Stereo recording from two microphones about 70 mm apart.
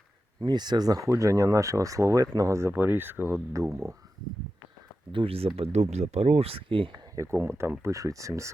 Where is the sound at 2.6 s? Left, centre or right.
Right.